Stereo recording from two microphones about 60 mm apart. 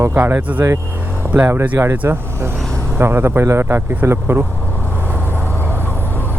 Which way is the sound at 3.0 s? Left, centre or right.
Right.